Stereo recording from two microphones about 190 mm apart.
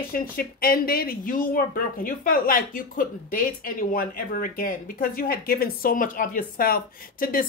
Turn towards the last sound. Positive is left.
turn(degrees=50)  # may be behind; listen again after turning